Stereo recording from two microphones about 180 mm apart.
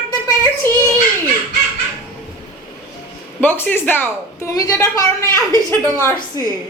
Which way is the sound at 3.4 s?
10° left (ahead or behind).